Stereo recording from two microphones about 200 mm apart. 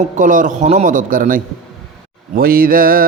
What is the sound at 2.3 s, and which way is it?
Mantra, 45° right (ahead or behind).